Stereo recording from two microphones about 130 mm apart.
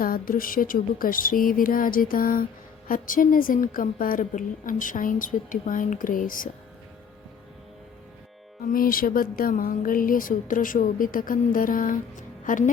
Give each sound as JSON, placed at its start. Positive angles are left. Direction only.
{"t": 0.0, "sound": "speech", "side_deg": 90}
{"t": 8.6, "sound": "a woman's voice", "side_deg": 90}